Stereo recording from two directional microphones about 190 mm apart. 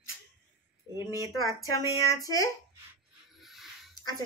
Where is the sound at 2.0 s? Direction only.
20° left (ahead or behind).